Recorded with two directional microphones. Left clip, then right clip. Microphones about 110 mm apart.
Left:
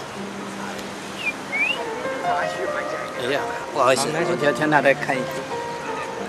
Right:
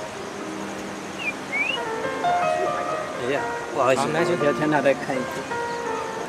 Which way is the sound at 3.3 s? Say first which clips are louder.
Left 1 dB; 25° left (ahead or behind).